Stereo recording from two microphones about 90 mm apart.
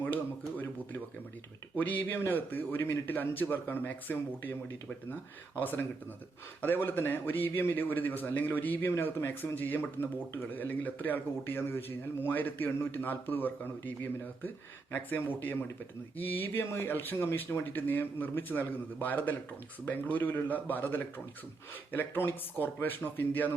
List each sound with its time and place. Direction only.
0.0 s a sound: 20° left (ahead or behind)
1.8 s a man's voice: 20° left (ahead or behind)
5.5 s a man's voice: 20° left (ahead or behind)